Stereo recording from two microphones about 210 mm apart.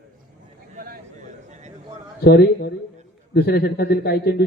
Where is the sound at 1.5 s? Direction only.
35° right (ahead or behind).